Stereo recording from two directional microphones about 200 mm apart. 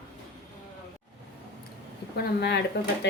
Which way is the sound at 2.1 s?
55° left (ahead or behind).